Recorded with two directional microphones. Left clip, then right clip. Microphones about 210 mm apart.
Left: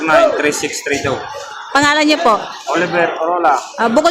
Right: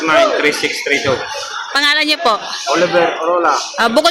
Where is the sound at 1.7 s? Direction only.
5° left (ahead or behind).